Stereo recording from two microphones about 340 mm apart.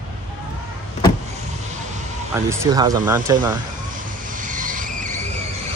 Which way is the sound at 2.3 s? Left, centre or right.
Centre.